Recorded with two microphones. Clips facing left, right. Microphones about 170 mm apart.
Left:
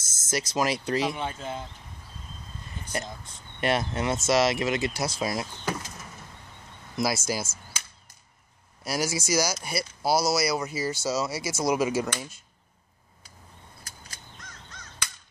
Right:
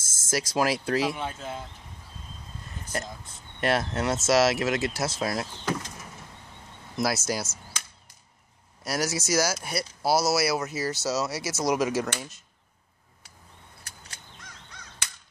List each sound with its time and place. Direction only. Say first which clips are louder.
0.3 s speech: right 1 dB; 5° right (ahead or behind)
2.8 s a sound: even; centre (ahead or behind)
3.6 s speech: even; centre (ahead or behind)
7.0 s speech: even; centre (ahead or behind)
8.8 s speech: even; centre (ahead or behind)
13.8 s a sound: even; 70° right (ahead or behind)